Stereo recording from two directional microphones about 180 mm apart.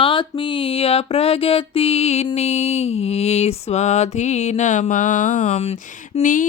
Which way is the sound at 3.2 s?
35° left (ahead or behind).